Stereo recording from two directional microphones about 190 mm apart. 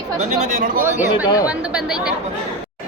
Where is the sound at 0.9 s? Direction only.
10° right (ahead or behind).